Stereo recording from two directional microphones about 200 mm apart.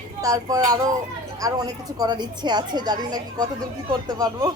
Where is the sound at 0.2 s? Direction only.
15° right (ahead or behind).